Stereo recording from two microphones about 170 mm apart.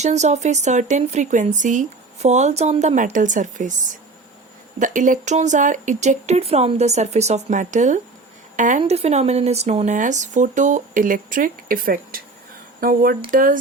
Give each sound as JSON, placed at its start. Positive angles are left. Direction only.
{"t": 0.0, "sound": "speech", "side_deg": -40}
{"t": 4.8, "sound": "a woman's voice", "side_deg": -50}